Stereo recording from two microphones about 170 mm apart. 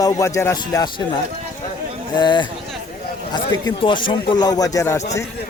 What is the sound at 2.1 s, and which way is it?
Speech, 25° left (ahead or behind).